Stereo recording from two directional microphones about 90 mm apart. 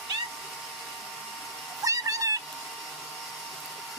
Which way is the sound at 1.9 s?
40° right (ahead or behind).